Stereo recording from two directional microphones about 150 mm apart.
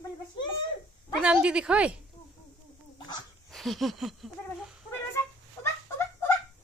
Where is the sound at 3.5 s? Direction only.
Centre (ahead or behind).